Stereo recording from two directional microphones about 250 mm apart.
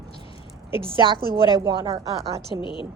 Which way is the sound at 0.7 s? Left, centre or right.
Centre.